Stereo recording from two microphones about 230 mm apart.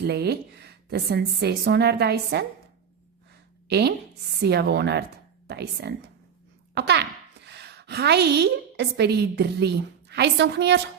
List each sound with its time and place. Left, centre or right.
0.0 s a woman's voice: right
3.7 s a woman's voice: right